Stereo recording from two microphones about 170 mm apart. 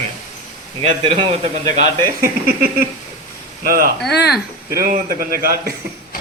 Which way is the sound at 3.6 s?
60° right (ahead or behind).